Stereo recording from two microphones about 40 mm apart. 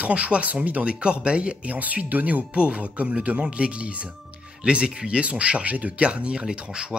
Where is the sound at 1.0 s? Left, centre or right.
Right.